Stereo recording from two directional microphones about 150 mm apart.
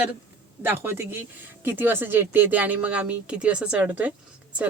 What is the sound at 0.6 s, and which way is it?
Speech, 15° right (ahead or behind).